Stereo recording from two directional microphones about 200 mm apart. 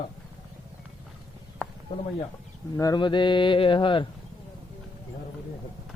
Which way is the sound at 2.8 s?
20° left (ahead or behind).